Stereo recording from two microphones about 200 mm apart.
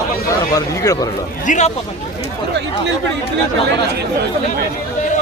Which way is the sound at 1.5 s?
35° left (ahead or behind).